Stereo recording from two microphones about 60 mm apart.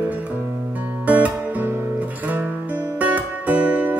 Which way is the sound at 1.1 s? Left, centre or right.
Right.